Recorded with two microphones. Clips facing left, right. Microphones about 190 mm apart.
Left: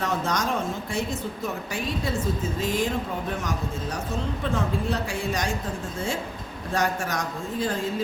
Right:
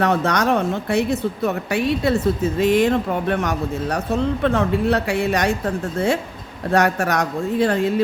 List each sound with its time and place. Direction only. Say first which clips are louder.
0.0 s speech: right 8 dB; 65° right (ahead or behind)